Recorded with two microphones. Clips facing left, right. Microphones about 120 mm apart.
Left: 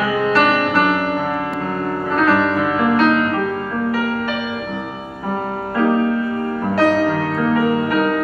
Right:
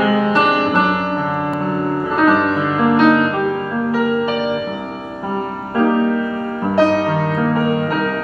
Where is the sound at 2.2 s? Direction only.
15° right (ahead or behind).